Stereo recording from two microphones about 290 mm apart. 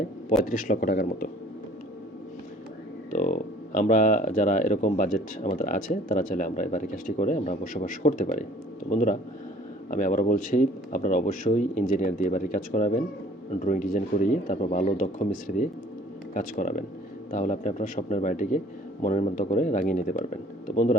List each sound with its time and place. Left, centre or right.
0.0 s speech: left
3.1 s speech: left